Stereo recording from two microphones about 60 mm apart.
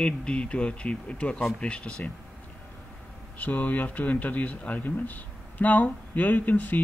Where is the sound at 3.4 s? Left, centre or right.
Left.